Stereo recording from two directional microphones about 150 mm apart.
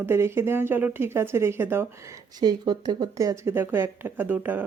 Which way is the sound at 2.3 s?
25° right (ahead or behind).